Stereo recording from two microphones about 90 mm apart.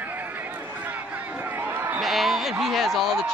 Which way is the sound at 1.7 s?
25° right (ahead or behind).